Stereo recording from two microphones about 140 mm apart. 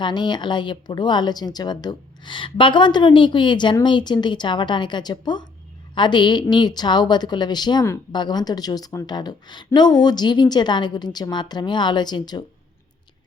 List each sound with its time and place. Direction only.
0.0 s a woman's voice: 30° left (ahead or behind)